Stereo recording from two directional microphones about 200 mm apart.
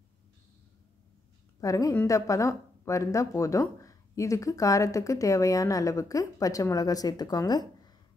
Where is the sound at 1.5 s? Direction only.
15° left (ahead or behind).